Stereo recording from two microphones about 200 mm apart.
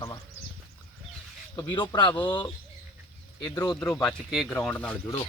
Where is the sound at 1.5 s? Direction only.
20° left (ahead or behind).